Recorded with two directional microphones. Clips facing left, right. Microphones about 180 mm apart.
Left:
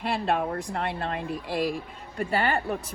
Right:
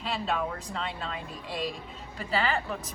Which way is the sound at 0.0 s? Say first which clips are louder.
Left 4 dB; 60° left (ahead or behind).